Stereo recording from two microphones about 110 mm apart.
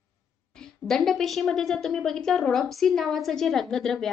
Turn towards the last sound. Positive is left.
turn(degrees=5)  # may be behind; listen again after turning